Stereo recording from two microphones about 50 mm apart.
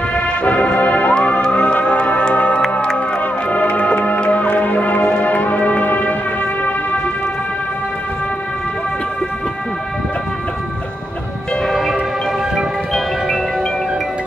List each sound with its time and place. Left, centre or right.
0.1 s music: left
11.7 s music: centre